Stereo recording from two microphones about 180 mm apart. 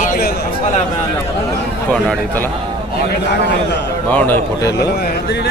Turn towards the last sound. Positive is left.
turn(degrees=10)  # may be behind; listen again after turning